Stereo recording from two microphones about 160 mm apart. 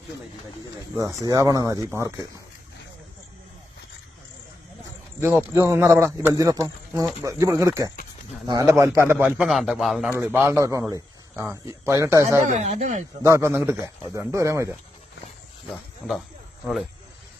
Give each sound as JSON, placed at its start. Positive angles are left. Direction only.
{"t": 1.3, "sound": "speech", "side_deg": -20}
{"t": 5.2, "sound": "a man's voice", "side_deg": -15}
{"t": 9.5, "sound": "a man's voice", "side_deg": 0}
{"t": 10.1, "sound": "a man's voice", "side_deg": -15}
{"t": 12.5, "sound": "speech", "side_deg": -45}
{"t": 13.2, "sound": "a man's voice", "side_deg": -15}